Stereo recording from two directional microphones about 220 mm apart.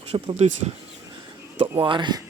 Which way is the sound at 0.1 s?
25° right (ahead or behind).